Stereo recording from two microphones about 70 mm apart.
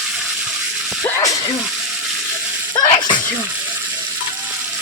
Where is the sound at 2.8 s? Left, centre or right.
Left.